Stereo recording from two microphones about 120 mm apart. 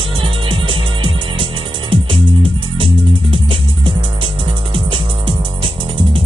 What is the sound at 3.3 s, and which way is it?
Music, 45° right (ahead or behind).